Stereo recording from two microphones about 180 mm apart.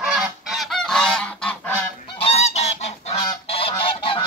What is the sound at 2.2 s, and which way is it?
Goose, 35° left (ahead or behind).